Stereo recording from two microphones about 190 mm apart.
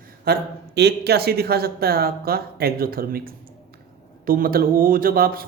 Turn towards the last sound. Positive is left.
turn(degrees=-50)  # may be behind; listen again after turning